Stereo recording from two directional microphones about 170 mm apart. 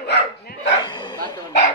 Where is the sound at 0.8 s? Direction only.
25° left (ahead or behind).